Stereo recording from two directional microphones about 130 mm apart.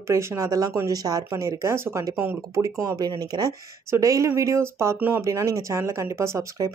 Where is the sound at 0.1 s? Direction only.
20° right (ahead or behind).